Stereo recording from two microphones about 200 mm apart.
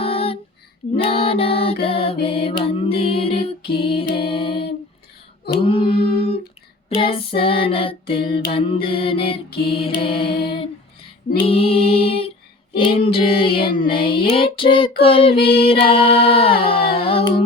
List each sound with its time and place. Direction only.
0.0 s female singing: 30° left (ahead or behind)
0.9 s music: 30° left (ahead or behind)
1.8 s child singing: 30° left (ahead or behind)
2.2 s music: 25° left (ahead or behind)
5.6 s child singing: 25° left (ahead or behind)
6.1 s humming: 30° left (ahead or behind)
6.9 s child singing: 30° left (ahead or behind)
11.3 s child singing: 30° left (ahead or behind)